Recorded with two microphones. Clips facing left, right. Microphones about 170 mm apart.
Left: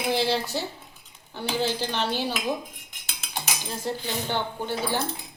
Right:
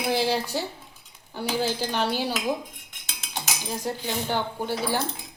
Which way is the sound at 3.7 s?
15° right (ahead or behind).